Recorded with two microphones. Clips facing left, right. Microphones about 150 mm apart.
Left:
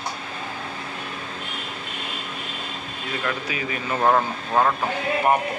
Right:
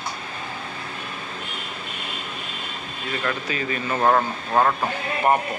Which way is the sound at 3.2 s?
10° left (ahead or behind).